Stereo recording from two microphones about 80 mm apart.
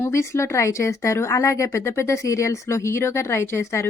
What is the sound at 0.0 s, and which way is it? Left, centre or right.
Speech, left.